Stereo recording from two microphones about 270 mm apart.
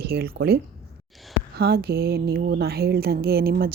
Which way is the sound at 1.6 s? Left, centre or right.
Right.